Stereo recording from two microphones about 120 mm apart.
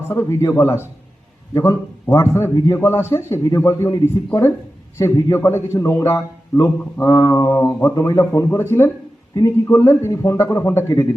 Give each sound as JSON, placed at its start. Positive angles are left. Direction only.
{"t": 0.1, "sound": "a man's voice", "side_deg": 25}